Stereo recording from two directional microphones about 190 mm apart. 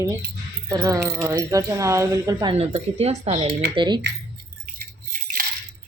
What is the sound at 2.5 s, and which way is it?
Speech, 30° right (ahead or behind).